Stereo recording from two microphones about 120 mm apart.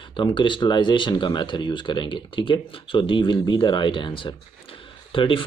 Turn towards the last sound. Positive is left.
turn(degrees=45)  # may be behind; listen again after turning